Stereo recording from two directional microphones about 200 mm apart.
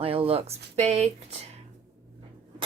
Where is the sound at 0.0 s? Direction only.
30° right (ahead or behind).